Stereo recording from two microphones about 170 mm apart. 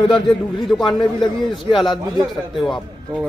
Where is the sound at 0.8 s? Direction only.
25° left (ahead or behind).